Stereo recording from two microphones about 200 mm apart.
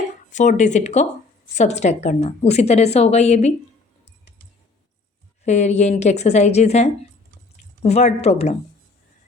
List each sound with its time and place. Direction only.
0.3 s a woman's voice: 35° left (ahead or behind)
5.5 s a woman's voice: 35° left (ahead or behind)